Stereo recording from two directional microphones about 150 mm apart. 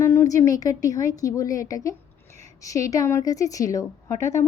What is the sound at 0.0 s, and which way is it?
A woman's voice, 15° left (ahead or behind).